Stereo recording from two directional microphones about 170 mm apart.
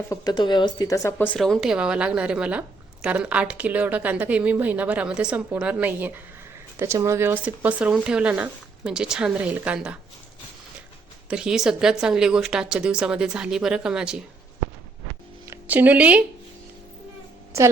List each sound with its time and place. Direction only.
0.1 s speech: 25° left (ahead or behind); by 10.0 s 5° right (ahead or behind)
11.3 s speech: 5° right (ahead or behind)
15.4 s speech: 10° right (ahead or behind)